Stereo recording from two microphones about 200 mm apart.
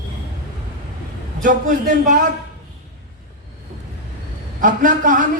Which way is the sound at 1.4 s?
40° right (ahead or behind).